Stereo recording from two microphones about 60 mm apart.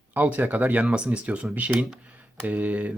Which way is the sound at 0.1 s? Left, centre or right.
Right.